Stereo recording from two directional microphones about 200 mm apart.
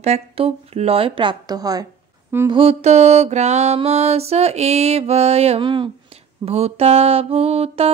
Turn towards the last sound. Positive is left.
turn(degrees=-30)  # may be behind; listen again after turning